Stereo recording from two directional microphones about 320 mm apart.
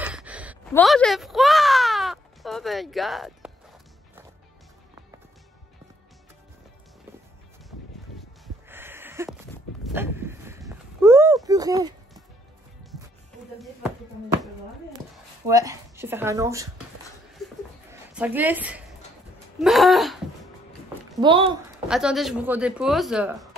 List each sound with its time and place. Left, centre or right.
0.0 s a sound: centre
8.6 s a sound: centre
15.4 s speech: centre
18.1 s speech: centre
21.2 s speech: centre
21.8 s speech: centre